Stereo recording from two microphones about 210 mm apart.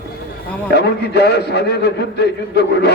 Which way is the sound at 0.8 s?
50° left (ahead or behind).